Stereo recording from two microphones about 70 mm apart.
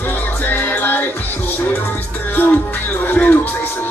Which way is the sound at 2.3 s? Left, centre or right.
Left.